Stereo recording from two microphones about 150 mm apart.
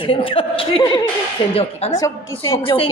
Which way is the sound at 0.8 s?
25° left (ahead or behind).